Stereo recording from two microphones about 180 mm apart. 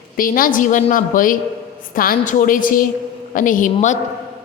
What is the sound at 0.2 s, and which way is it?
A woman's voice, 50° left (ahead or behind).